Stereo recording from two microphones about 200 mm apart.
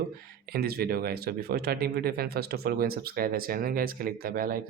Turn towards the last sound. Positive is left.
turn(degrees=-45)  # may be behind; listen again after turning